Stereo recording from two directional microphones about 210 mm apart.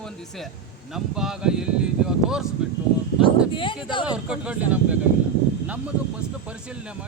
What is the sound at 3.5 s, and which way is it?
Speech, 25° left (ahead or behind).